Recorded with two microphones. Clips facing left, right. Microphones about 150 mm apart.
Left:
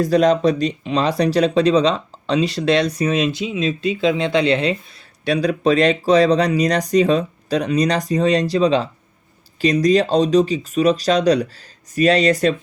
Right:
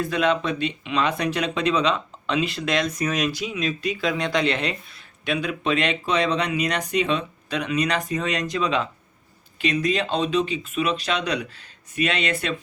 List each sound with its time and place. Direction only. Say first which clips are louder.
0.0 s speech: left 8 dB; 40° left (ahead or behind)